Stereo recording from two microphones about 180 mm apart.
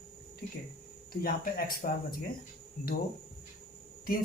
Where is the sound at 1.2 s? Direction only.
55° left (ahead or behind).